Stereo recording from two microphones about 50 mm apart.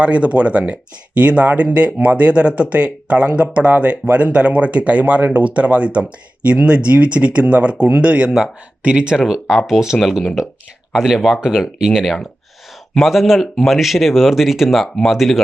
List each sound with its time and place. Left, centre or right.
0.0 s speech: right; by 11.3 s centre
11.3 s speech: centre
12.0 s speech: centre